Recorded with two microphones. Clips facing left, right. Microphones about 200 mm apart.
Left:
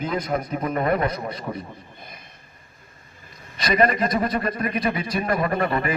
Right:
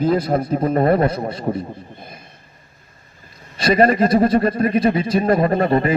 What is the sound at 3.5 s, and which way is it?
Speech, 30° right (ahead or behind).